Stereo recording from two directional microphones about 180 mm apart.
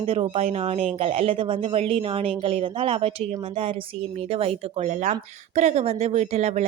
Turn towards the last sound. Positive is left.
turn(degrees=-35)  # may be behind; listen again after turning